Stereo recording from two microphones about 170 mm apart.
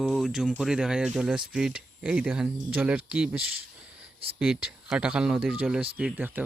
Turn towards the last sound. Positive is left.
turn(degrees=-10)  # may be behind; listen again after turning